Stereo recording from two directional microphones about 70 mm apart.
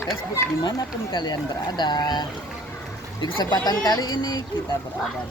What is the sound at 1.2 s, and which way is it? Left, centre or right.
Speech, left.